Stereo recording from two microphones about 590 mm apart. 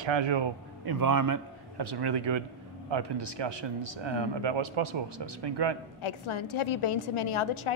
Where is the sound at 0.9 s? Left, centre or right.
Right.